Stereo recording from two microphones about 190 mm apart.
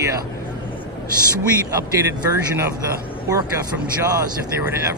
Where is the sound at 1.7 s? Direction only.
20° right (ahead or behind).